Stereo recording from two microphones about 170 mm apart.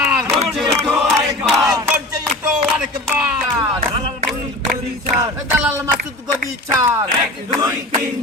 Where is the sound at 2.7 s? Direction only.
5° right (ahead or behind).